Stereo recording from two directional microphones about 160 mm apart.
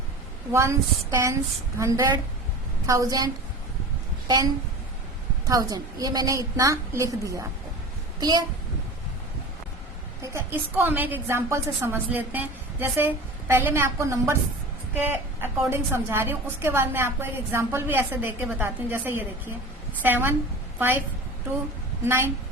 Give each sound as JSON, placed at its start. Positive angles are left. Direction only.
{"t": 0.5, "sound": "a woman's voice", "side_deg": -20}
{"t": 5.5, "sound": "a woman's voice", "side_deg": -25}
{"t": 10.3, "sound": "a woman's voice", "side_deg": -15}
{"t": 22.0, "sound": "a woman's voice", "side_deg": -15}